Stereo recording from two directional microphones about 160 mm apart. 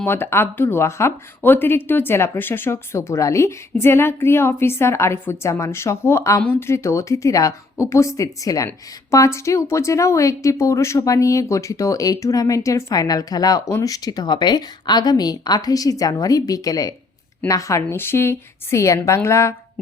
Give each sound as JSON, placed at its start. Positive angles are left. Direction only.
{"t": 0.0, "sound": "speech", "side_deg": 15}